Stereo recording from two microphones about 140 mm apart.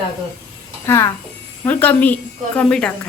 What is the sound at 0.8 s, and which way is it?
A woman's voice, 20° left (ahead or behind).